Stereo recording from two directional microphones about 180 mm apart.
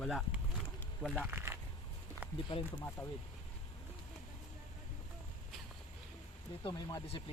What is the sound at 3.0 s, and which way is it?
Speech, 10° left (ahead or behind).